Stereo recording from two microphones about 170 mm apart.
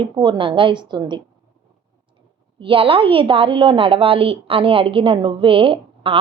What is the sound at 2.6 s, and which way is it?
A woman's voice, 30° right (ahead or behind).